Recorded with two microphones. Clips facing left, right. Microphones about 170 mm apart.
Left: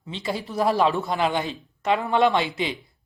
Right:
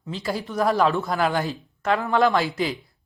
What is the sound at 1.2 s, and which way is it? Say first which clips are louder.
Speech: right 2 dB; 20° left (ahead or behind).